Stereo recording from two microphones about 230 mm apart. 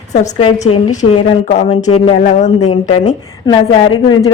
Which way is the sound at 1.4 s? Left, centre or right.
Left.